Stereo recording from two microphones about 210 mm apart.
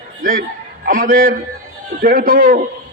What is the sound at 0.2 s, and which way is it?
A man's voice, 45° right (ahead or behind).